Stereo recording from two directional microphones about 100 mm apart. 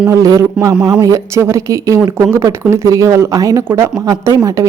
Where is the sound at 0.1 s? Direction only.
35° right (ahead or behind).